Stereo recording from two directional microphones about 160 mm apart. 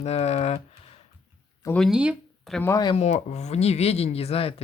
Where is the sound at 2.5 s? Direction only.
15° left (ahead or behind).